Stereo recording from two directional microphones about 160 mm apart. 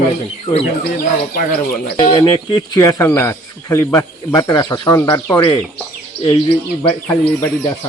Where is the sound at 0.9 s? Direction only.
70° left (ahead or behind).